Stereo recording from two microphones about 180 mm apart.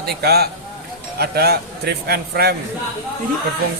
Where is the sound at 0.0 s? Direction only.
60° right (ahead or behind).